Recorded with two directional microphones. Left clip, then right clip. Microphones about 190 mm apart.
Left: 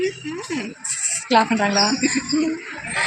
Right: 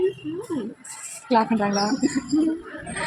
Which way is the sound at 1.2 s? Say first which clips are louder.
Left 3 dB; centre (ahead or behind).